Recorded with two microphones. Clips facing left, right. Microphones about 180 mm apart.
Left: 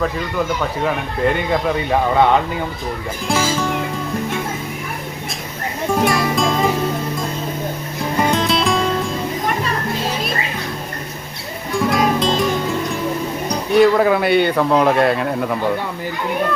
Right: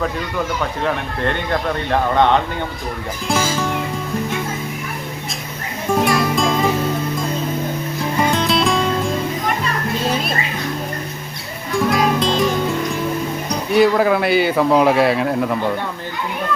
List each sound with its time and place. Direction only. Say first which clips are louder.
0.6 s speech: left 1 dB; 5° left (ahead or behind)
5.9 s music: right 1 dB; centre (ahead or behind)
8.3 s music: even; centre (ahead or behind)
11.8 s music: even; centre (ahead or behind)
13.7 s speech: left 1 dB; centre (ahead or behind)